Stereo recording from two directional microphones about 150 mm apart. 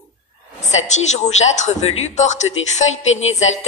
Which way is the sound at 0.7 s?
50° left (ahead or behind).